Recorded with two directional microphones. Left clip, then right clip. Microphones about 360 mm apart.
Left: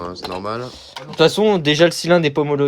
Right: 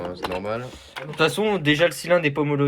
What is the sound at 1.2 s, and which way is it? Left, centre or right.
Speech, left.